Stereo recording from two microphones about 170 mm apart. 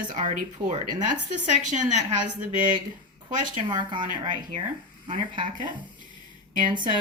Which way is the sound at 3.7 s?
25° right (ahead or behind).